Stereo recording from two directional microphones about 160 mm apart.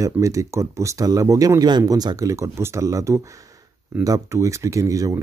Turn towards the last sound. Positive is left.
turn(degrees=-20)  # may be behind; listen again after turning